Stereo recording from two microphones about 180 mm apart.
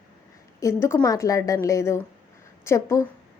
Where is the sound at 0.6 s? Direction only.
15° left (ahead or behind).